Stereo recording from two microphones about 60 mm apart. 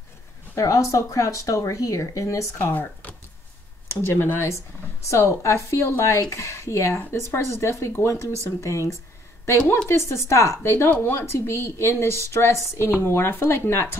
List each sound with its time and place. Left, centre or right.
0.6 s speech: left
2.6 s speech: left
3.9 s speech: left
5.0 s speech: left
10.9 s speech: left